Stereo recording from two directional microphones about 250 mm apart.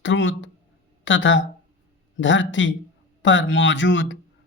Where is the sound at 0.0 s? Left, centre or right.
Left.